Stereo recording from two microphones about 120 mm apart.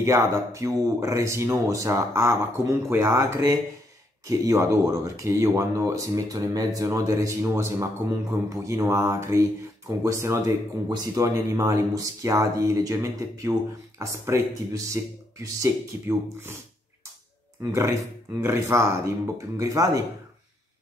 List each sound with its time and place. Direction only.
0.0 s speech: 25° right (ahead or behind)
17.6 s speech: 20° right (ahead or behind)